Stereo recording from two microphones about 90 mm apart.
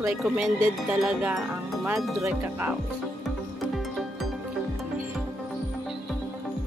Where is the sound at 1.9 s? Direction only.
Centre (ahead or behind).